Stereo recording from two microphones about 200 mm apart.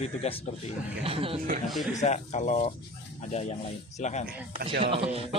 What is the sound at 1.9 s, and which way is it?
Speech, 35° left (ahead or behind).